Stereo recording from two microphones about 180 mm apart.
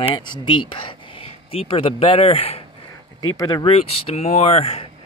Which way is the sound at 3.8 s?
35° left (ahead or behind).